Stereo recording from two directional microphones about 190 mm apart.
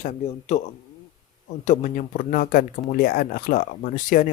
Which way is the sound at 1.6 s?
40° left (ahead or behind).